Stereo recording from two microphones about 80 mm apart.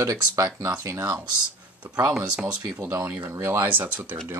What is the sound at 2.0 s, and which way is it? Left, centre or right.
Speech, centre.